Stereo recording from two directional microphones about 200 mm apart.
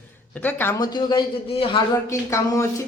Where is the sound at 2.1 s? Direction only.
15° left (ahead or behind).